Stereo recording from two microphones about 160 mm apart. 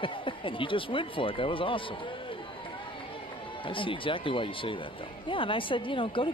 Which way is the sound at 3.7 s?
30° left (ahead or behind).